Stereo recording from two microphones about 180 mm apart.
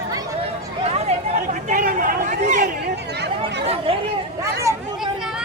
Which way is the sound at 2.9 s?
70° right (ahead or behind).